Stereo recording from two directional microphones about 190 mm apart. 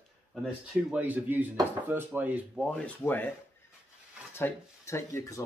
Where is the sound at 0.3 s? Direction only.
Centre (ahead or behind).